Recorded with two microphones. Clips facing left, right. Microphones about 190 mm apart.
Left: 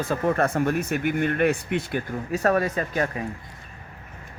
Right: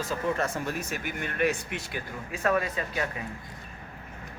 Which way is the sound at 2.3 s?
40° left (ahead or behind).